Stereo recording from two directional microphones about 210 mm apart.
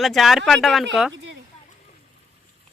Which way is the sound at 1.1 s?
60° right (ahead or behind).